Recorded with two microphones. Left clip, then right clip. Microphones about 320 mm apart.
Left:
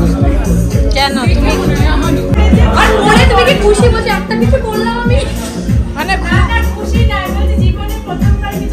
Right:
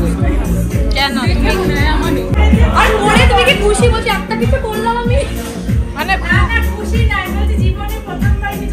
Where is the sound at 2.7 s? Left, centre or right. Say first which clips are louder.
Left 2 dB; centre.